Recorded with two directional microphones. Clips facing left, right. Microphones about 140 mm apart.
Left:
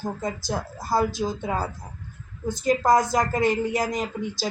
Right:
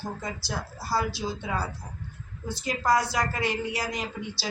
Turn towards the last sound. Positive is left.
turn(degrees=45)  # may be behind; listen again after turning